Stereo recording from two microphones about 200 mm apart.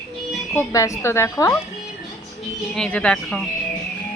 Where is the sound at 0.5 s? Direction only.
15° left (ahead or behind).